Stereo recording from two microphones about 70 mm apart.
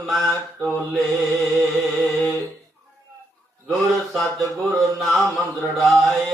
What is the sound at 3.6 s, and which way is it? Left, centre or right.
Chant, centre.